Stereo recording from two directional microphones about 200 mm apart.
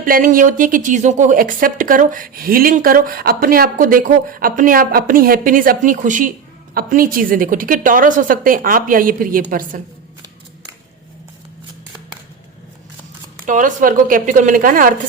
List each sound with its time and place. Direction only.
0.0 s a woman's voice: 45° right (ahead or behind)
13.4 s a woman's voice: 40° right (ahead or behind)